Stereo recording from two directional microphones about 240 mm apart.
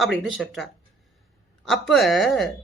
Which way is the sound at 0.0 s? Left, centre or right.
Centre.